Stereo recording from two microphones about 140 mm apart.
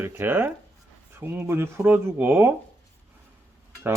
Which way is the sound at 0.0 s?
15° right (ahead or behind).